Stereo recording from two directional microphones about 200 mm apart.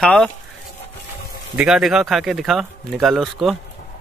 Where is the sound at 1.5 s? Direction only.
5° right (ahead or behind).